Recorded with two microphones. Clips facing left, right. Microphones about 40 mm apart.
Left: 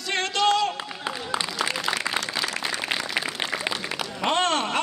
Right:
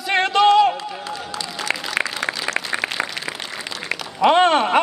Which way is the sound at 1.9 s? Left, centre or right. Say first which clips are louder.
Right 4 dB; right.